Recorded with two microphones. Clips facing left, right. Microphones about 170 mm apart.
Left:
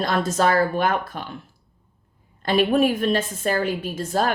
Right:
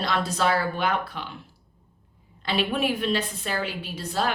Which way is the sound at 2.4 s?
45° left (ahead or behind).